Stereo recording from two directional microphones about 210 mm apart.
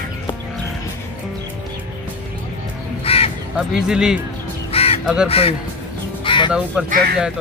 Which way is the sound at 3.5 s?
5° right (ahead or behind).